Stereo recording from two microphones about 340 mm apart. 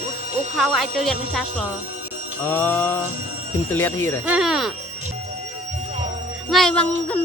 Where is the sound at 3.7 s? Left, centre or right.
Centre.